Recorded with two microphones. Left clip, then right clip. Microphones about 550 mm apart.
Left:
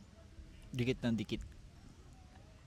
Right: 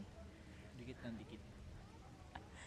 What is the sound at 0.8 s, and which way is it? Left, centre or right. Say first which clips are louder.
Speech: left 16 dB; left.